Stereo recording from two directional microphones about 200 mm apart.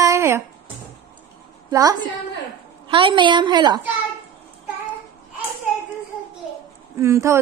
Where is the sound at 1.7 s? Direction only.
20° right (ahead or behind).